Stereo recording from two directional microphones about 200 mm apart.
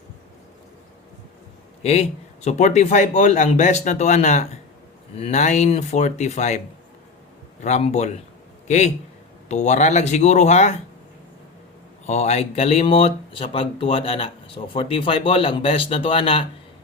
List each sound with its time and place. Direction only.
1.8 s speech: 30° left (ahead or behind)
7.6 s a man's voice: 35° left (ahead or behind)
12.0 s speech: 35° left (ahead or behind)